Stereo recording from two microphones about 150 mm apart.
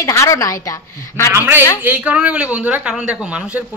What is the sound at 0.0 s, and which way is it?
A woman's voice, 20° left (ahead or behind).